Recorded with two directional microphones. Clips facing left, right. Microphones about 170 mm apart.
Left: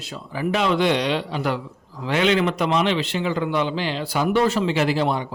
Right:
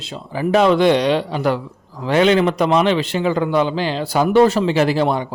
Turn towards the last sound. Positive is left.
turn(degrees=-45)  # may be behind; listen again after turning